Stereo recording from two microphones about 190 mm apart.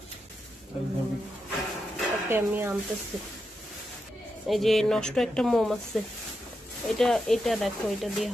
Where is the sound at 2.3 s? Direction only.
10° right (ahead or behind).